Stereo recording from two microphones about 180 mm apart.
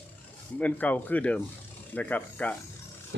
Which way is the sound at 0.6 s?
10° left (ahead or behind).